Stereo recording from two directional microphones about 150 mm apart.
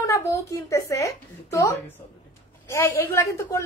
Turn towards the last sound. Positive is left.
turn(degrees=20)  # may be behind; listen again after turning